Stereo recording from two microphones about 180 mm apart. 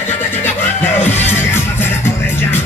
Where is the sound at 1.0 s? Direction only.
10° left (ahead or behind).